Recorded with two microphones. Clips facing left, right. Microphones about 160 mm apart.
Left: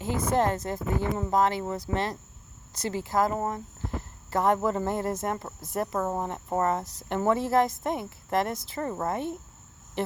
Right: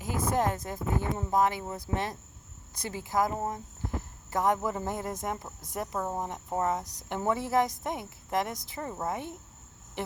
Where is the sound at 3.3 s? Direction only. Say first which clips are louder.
Left 4 dB; 60° left (ahead or behind).